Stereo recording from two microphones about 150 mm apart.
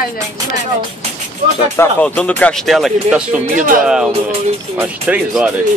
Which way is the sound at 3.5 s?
65° right (ahead or behind).